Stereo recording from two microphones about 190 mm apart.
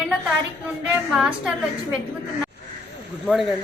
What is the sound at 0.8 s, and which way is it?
Speech, 5° right (ahead or behind).